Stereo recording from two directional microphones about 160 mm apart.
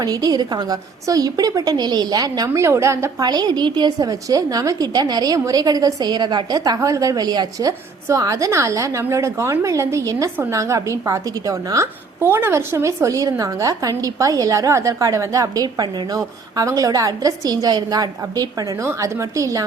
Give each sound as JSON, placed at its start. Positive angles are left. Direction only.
{"t": 0.0, "sound": "a woman's voice", "side_deg": -25}